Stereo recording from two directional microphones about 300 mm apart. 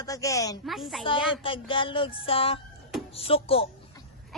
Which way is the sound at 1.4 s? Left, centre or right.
Centre.